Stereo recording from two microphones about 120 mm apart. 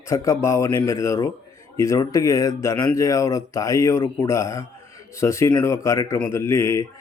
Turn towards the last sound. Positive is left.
turn(degrees=25)  # may be behind; listen again after turning